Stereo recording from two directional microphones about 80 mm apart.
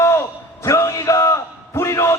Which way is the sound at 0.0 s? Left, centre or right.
Left.